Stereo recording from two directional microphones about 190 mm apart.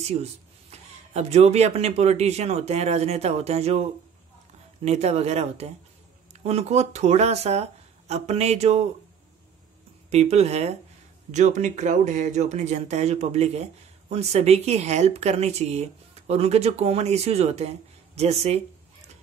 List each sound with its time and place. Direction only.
0.0 s speech: 35° right (ahead or behind)
10.0 s speech: 35° right (ahead or behind)